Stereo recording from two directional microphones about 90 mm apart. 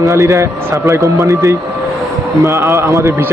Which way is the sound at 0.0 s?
35° right (ahead or behind).